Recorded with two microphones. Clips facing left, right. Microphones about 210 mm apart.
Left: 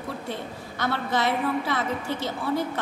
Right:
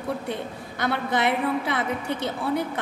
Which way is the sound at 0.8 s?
15° right (ahead or behind).